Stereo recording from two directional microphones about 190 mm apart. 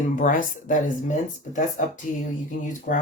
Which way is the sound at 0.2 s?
45° left (ahead or behind).